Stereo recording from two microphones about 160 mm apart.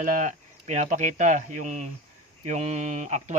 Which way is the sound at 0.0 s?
50° right (ahead or behind).